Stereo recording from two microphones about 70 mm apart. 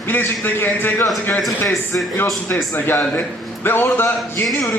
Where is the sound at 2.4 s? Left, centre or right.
Left.